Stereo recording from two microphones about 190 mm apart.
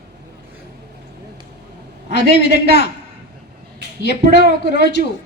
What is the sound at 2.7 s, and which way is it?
Speech, 60° left (ahead or behind).